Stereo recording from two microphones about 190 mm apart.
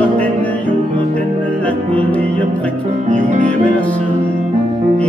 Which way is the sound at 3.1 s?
40° right (ahead or behind).